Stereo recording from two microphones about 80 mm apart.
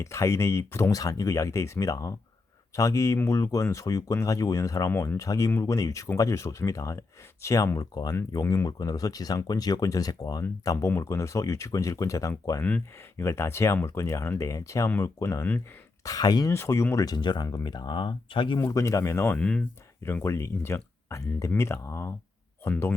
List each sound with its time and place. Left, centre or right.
0.0 s speech: left
0.9 s speech: left
16.0 s speech: left
16.5 s speech: left
17.1 s speech: left
18.6 s speech: left
19.4 s speech: centre
20.2 s speech: left